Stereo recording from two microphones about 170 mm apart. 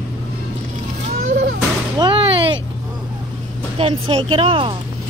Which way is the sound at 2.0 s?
30° right (ahead or behind).